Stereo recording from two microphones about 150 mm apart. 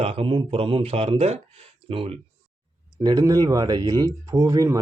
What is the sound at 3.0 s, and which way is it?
Speech, 25° right (ahead or behind).